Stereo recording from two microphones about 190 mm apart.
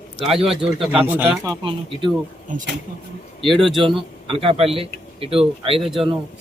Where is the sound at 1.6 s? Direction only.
25° right (ahead or behind).